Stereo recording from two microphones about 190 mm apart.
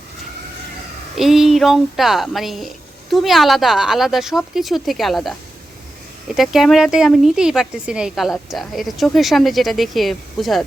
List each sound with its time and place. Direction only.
1.1 s speech: centre (ahead or behind)
6.3 s speech: centre (ahead or behind)